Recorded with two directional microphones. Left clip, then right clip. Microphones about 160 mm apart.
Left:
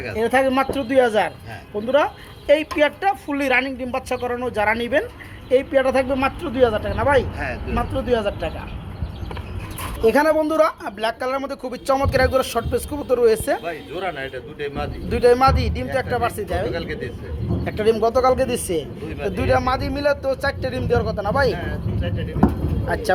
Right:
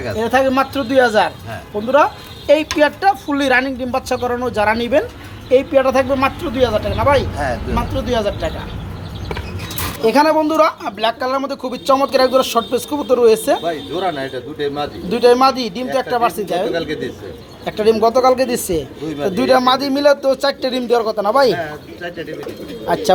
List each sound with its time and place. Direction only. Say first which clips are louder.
0.2 s speech: right 3 dB; 15° left (ahead or behind)
2.5 s speech: right 4 dB; centre (ahead or behind)
5.8 s speech: right 4 dB; 15° left (ahead or behind)
7.3 s speech: right 7 dB; 30° right (ahead or behind)
7.8 s speech: even; 20° left (ahead or behind)
10.0 s speech: right 3 dB; 20° left (ahead or behind); by 13.6 s 10° right (ahead or behind)
14.0 s a man's voice: right 5 dB; 35° right (ahead or behind)
15.1 s speech: right 4 dB; 5° right (ahead or behind)
16.7 s speech: right 6 dB; 45° right (ahead or behind)
17.7 s speech: right 5 dB; 10° right (ahead or behind)
19.3 s speech: right 7 dB; 25° right (ahead or behind)